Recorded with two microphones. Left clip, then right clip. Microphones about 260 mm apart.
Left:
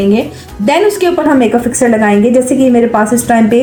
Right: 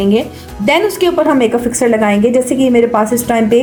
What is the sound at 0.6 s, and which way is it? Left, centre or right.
A woman's voice, right.